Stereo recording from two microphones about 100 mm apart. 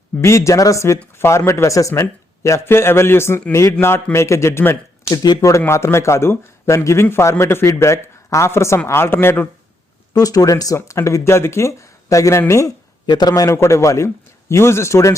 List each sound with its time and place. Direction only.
0.2 s speech: 30° left (ahead or behind)
5.1 s speech: 40° left (ahead or behind); by 9.5 s 20° left (ahead or behind)
10.1 s speech: 35° left (ahead or behind)
13.1 s speech: 45° left (ahead or behind); by 15.1 s 30° left (ahead or behind)